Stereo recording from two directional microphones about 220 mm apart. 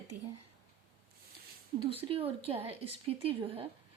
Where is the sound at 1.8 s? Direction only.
25° right (ahead or behind).